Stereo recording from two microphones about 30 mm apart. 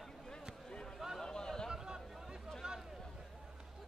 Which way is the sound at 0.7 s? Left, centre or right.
Left.